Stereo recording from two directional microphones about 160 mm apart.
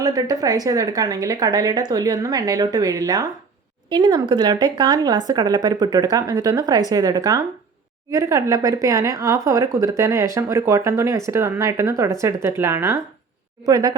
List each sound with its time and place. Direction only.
0.0 s a woman's voice: 25° right (ahead or behind)